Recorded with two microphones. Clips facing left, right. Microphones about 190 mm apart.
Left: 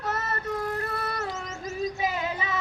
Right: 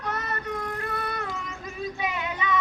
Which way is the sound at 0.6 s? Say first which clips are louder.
Left 1 dB; 40° left (ahead or behind).